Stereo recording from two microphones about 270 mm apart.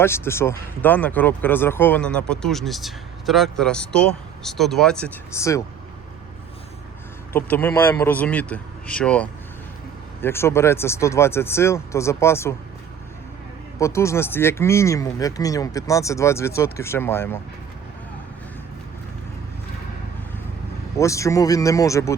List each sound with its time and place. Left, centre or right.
0.0 s speech: centre
7.3 s speech: centre
13.7 s speech: centre
21.0 s speech: centre